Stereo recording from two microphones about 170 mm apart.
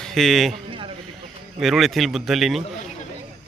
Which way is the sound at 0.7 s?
30° right (ahead or behind).